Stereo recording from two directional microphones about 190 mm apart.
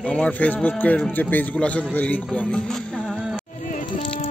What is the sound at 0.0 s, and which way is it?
Speech, 5° left (ahead or behind).